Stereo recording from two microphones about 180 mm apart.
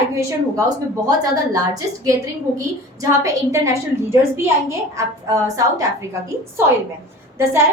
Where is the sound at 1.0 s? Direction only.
20° right (ahead or behind).